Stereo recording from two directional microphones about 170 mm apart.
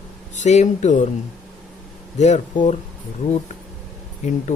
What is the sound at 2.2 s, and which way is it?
Speech, 45° left (ahead or behind).